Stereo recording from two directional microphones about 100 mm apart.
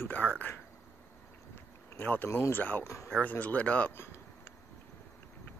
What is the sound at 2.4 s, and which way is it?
Speech, 20° left (ahead or behind).